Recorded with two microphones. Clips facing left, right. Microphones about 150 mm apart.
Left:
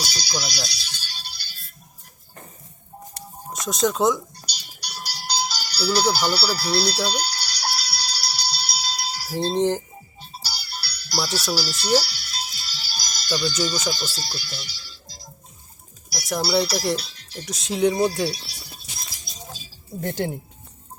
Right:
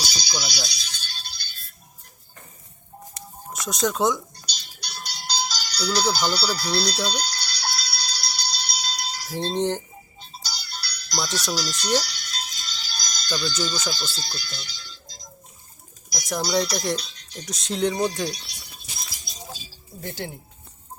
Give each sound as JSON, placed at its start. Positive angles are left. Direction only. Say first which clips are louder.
{"t": 0.0, "sound": "music", "louder": "left 2 dB", "side_deg": 5}
{"t": 3.7, "sound": "speech", "louder": "left 2 dB", "side_deg": 0}
{"t": 4.4, "sound": "music", "louder": "left 1 dB", "side_deg": 10}
{"t": 16.1, "sound": "speech", "louder": "left 2 dB", "side_deg": 5}
{"t": 20.0, "sound": "speech", "louder": "left 7 dB", "side_deg": 50}